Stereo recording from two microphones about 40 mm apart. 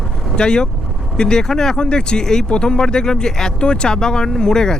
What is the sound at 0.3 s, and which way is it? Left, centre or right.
Speech, left.